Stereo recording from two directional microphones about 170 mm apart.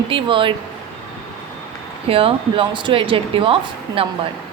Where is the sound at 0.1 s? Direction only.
30° right (ahead or behind).